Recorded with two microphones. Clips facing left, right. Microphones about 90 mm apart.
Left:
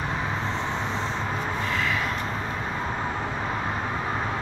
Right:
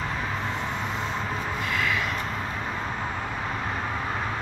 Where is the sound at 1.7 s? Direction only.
35° left (ahead or behind).